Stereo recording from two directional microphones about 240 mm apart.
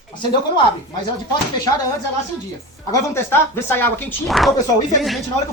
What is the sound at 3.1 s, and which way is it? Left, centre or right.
A child's voice, centre.